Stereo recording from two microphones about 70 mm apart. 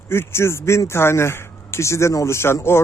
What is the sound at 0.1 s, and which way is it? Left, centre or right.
Speech, left.